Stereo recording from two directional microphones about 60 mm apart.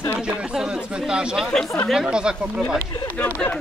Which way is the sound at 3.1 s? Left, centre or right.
Left.